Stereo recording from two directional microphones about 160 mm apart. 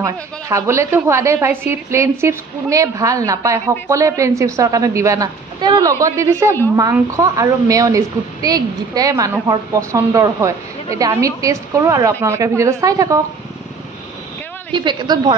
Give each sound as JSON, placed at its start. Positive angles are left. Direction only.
{"t": 0.0, "sound": "a woman's voice", "side_deg": -20}
{"t": 14.7, "sound": "a woman's voice", "side_deg": -30}